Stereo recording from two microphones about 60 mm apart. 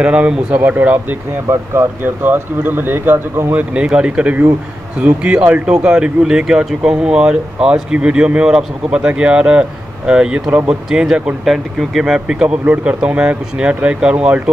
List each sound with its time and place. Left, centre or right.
0.0 s speech: centre
0.6 s speech: right
1.5 s speech: right
2.0 s speech: right
3.5 s speech: centre